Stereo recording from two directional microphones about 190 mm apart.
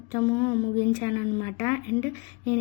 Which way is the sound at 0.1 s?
15° left (ahead or behind).